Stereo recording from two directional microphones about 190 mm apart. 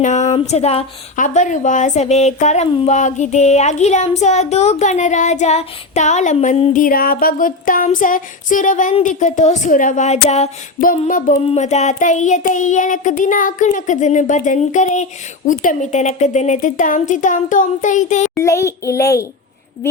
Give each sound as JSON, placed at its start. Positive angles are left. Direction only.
{"t": 0.0, "sound": "speech", "side_deg": 40}
{"t": 18.3, "sound": "a child's voice", "side_deg": 15}